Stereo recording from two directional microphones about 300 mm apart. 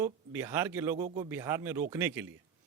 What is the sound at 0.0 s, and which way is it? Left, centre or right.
A man's voice, centre.